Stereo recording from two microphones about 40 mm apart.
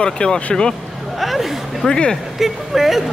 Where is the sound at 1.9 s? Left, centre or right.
Centre.